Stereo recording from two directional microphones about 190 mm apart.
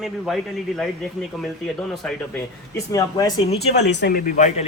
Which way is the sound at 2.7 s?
15° left (ahead or behind).